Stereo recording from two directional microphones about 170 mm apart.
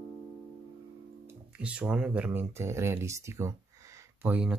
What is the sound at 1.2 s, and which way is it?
Speech, 5° right (ahead or behind).